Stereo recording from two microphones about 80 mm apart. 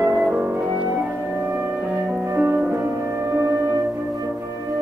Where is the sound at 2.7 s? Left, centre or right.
Right.